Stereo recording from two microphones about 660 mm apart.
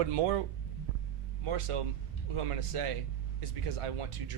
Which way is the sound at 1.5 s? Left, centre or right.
Right.